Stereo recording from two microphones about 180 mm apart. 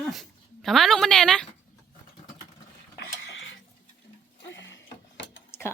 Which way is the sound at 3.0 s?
85° left.